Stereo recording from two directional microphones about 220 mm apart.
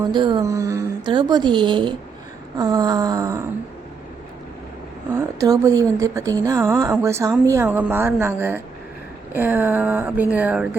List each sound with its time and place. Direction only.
0.0 s a woman's voice: 20° right (ahead or behind)
5.1 s a woman's voice: 15° right (ahead or behind)